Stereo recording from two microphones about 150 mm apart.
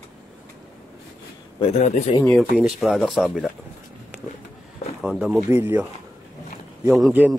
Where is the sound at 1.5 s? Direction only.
45° left (ahead or behind).